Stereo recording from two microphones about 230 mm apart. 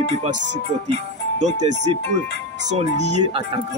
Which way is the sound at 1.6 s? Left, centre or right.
Right.